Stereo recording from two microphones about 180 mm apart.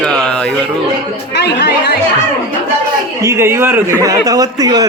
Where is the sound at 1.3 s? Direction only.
70° left (ahead or behind).